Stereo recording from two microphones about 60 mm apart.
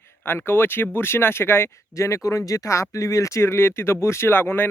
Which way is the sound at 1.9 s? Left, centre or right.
Left.